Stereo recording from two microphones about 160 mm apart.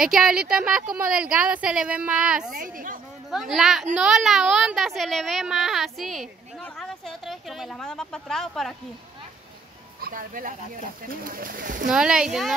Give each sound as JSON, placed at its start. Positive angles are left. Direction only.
{"t": 0.0, "sound": "a woman's voice", "side_deg": -5}
{"t": 2.5, "sound": "speech", "side_deg": -60}
{"t": 3.3, "sound": "speech", "side_deg": -5}
{"t": 9.9, "sound": "speech", "side_deg": -65}
{"t": 11.9, "sound": "speech", "side_deg": -5}